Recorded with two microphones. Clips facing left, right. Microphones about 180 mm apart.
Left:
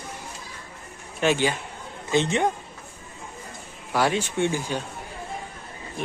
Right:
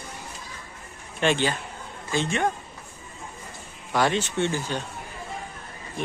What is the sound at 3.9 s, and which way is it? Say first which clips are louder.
Speech: even; 10° left (ahead or behind).